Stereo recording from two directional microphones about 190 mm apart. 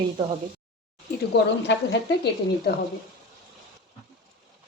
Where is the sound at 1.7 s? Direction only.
70° left (ahead or behind).